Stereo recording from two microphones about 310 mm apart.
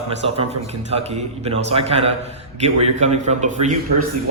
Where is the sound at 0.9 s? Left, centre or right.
Centre.